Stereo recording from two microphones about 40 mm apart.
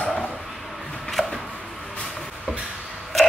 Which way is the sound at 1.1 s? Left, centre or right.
Centre.